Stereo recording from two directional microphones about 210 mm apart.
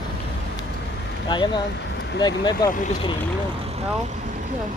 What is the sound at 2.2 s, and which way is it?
Speech, 20° left (ahead or behind).